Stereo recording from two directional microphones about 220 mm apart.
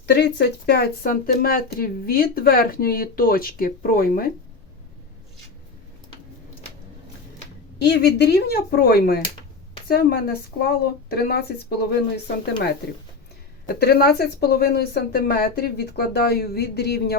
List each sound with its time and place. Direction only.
0.0 s speech: 50° left (ahead or behind)
7.8 s speech: 50° left (ahead or behind)
13.7 s speech: 45° left (ahead or behind)